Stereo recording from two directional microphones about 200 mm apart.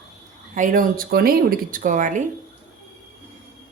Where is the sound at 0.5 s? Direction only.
40° right (ahead or behind).